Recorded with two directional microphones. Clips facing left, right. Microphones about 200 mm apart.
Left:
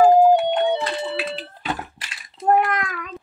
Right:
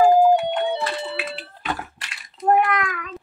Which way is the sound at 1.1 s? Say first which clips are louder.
Left 3 dB; 35° left (ahead or behind).